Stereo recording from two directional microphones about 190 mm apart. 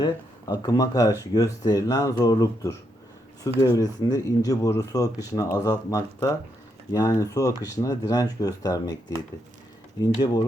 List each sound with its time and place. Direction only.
0.0 s speech: 20° left (ahead or behind)
3.8 s speech: 20° left (ahead or behind)